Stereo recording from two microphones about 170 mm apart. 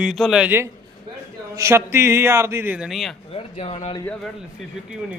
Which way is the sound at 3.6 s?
35° left (ahead or behind).